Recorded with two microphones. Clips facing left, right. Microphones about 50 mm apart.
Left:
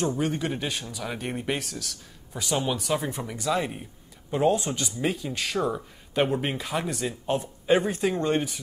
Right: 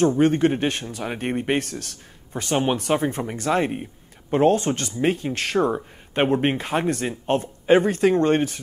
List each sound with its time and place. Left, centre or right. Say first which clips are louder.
0.2 s speech: right 9 dB; right
1.6 s speech: right 6 dB; right
7.6 s speech: right 6 dB; right
7.9 s speech: right 7 dB; right